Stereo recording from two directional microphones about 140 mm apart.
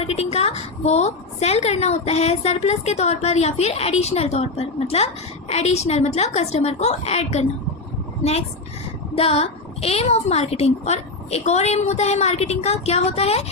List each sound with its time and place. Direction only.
0.0 s a woman's voice: 45° left (ahead or behind)